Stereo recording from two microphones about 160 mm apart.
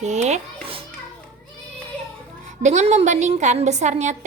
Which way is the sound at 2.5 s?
45° right (ahead or behind).